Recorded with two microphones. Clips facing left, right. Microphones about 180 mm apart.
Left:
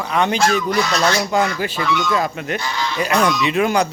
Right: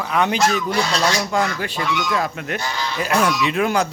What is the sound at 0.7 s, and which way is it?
Goose, 30° right (ahead or behind).